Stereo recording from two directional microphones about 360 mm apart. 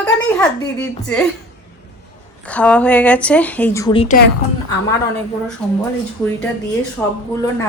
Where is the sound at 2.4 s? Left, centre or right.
Centre; by 4.3 s left.